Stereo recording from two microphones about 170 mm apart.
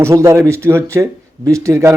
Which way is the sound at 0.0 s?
15° right (ahead or behind).